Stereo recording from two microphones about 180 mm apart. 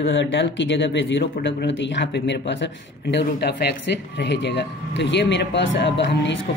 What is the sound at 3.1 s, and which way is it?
Speech, 75° left (ahead or behind).